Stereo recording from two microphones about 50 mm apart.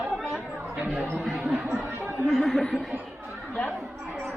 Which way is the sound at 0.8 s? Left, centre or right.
Right.